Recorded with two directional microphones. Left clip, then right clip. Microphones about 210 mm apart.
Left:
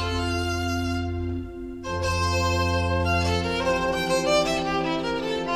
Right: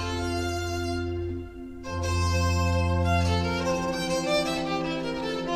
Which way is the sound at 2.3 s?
25° left (ahead or behind).